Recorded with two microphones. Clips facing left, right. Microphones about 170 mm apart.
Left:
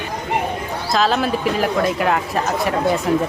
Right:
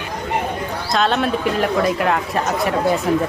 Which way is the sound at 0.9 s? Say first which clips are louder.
Even; centre (ahead or behind).